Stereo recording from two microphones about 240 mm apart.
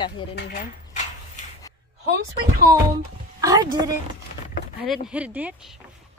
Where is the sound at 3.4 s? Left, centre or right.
Centre.